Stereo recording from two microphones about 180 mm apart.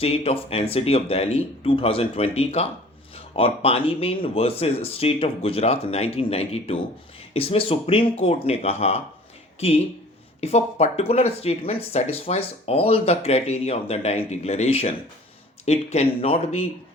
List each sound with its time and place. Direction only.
0.0 s speech: 30° left (ahead or behind)
10.4 s speech: 35° left (ahead or behind)